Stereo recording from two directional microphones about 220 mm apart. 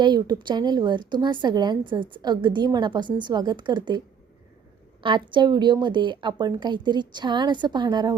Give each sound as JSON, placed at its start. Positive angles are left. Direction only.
{"t": 0.0, "sound": "a woman's voice", "side_deg": -20}
{"t": 5.0, "sound": "a woman's voice", "side_deg": -20}